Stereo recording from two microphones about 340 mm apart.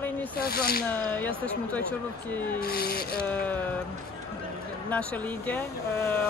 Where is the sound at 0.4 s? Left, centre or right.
Left.